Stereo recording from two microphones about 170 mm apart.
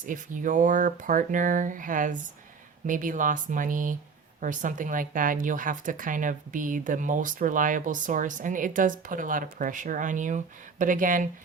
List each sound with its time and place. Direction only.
0.0 s speech: 50° right (ahead or behind)